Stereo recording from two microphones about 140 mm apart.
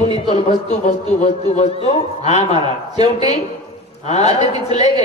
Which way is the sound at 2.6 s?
35° right (ahead or behind).